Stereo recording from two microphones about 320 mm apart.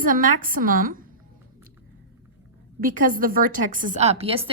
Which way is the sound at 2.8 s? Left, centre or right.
Right.